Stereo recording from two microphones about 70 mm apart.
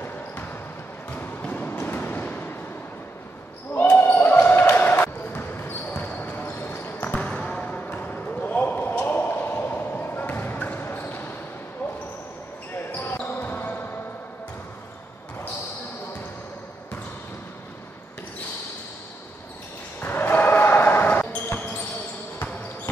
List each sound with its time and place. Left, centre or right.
1.1 s basketball bounce: left
1.8 s vehicle: left
4.1 s basketball bounce: left
7.2 s basketball bounce: centre
12.9 s basketball bounce: left
20.0 s basketball bounce: left